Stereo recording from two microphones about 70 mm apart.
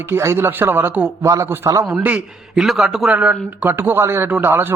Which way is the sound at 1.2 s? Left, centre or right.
Right.